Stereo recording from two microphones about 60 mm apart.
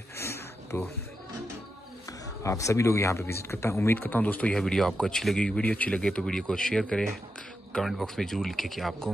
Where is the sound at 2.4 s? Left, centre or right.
Left.